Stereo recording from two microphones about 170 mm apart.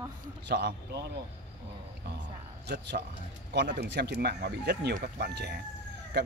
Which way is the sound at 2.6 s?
75° right (ahead or behind).